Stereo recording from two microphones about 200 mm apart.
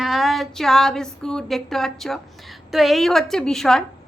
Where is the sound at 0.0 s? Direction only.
Centre (ahead or behind).